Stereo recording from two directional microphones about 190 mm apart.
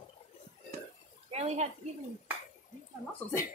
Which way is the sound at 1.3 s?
35° right (ahead or behind).